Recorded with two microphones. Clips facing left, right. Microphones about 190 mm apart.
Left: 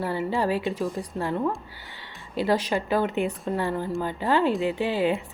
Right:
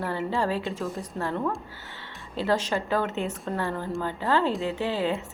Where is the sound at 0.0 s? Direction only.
15° left (ahead or behind).